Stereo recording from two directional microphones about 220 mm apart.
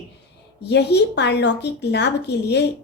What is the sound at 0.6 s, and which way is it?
A woman's voice, 50° left (ahead or behind).